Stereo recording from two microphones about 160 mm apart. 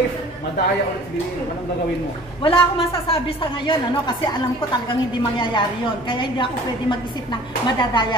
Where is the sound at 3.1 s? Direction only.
35° left (ahead or behind).